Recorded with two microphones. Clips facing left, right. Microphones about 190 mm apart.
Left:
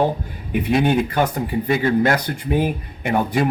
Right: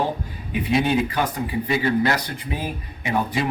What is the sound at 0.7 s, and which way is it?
Speech, 55° left (ahead or behind).